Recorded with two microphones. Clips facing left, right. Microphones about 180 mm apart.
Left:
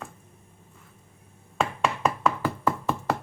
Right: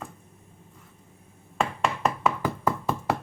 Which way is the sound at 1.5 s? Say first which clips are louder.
Even; centre (ahead or behind).